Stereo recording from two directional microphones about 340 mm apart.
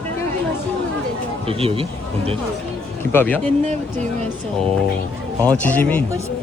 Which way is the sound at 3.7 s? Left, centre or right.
Right.